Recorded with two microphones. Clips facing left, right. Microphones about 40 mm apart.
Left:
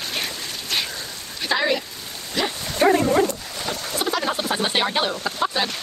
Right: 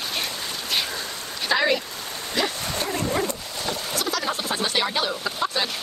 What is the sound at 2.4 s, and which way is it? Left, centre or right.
Dog, centre.